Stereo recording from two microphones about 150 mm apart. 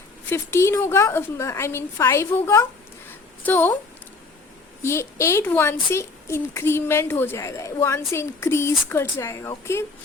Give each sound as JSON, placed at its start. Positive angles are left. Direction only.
{"t": 0.3, "sound": "a woman's voice", "side_deg": 15}
{"t": 4.8, "sound": "a woman's voice", "side_deg": 20}